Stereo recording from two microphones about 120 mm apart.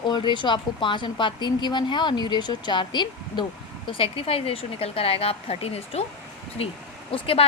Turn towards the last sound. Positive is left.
turn(degrees=55)  # may be behind; listen again after turning